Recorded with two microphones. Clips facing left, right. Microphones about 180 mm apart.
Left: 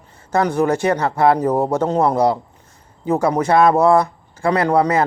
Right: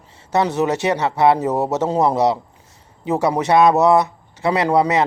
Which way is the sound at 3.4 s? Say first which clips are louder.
Right 1 dB; 20° right (ahead or behind).